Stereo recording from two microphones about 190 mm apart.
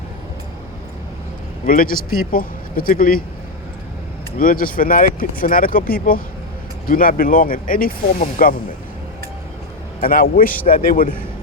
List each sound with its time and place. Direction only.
1.6 s speech: 45° left (ahead or behind)
4.4 s speech: 45° left (ahead or behind)
10.0 s speech: 50° left (ahead or behind)